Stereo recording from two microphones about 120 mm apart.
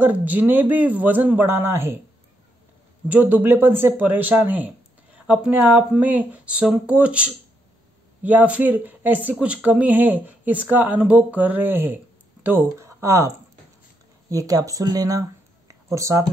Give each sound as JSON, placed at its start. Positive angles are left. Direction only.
{"t": 0.0, "sound": "speech", "side_deg": -15}
{"t": 3.1, "sound": "speech", "side_deg": -15}
{"t": 14.3, "sound": "speech", "side_deg": -30}